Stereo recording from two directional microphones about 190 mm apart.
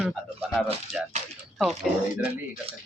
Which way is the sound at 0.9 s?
35° left (ahead or behind).